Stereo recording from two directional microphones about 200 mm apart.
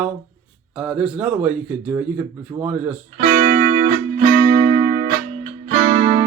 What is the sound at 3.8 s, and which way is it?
Music, 35° right (ahead or behind).